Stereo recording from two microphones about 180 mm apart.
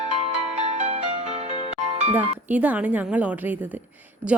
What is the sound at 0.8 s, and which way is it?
Music, 35° right (ahead or behind).